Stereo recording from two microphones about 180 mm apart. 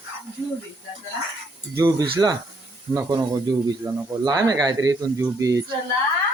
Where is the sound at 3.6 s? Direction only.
20° right (ahead or behind).